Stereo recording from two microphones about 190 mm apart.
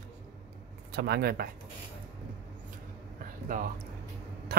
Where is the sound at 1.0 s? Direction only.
60° right (ahead or behind).